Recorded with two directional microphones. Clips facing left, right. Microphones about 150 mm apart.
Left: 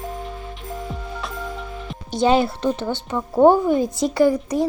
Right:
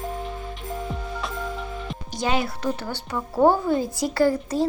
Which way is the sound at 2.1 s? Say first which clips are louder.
Left 8 dB; 30° left (ahead or behind).